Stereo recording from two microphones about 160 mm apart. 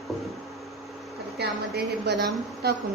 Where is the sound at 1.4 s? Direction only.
90° right.